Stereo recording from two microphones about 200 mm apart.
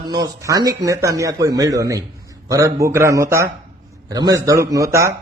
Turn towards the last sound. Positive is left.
turn(degrees=-15)  # may be behind; listen again after turning